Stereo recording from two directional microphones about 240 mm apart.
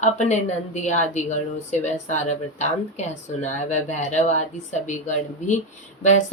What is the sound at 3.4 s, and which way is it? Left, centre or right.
A woman's voice, left.